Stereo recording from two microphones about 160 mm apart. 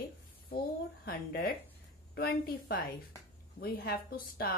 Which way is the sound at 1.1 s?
70° left (ahead or behind).